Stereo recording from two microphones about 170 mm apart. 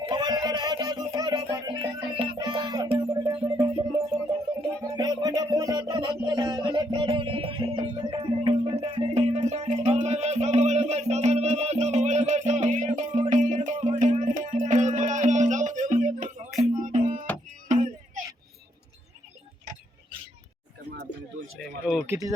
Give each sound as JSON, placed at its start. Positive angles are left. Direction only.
{"t": 0.0, "sound": "music", "side_deg": -25}
{"t": 4.8, "sound": "music", "side_deg": -20}
{"t": 17.7, "sound": "a sound", "side_deg": -45}
{"t": 22.0, "sound": "speech", "side_deg": -15}